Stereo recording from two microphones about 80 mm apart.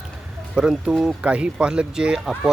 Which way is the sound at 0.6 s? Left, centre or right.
Centre.